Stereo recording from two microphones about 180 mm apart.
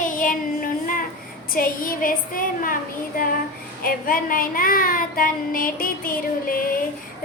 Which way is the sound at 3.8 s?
50° left (ahead or behind).